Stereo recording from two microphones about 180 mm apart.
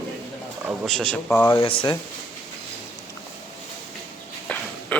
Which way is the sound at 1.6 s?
30° left (ahead or behind).